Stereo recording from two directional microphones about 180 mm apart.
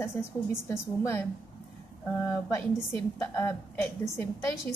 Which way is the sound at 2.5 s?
10° left (ahead or behind).